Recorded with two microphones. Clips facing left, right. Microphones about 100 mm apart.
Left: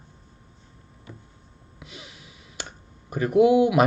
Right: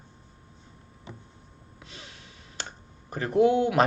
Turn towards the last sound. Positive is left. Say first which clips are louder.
# left 4 dB
turn(degrees=10)  # may be behind; listen again after turning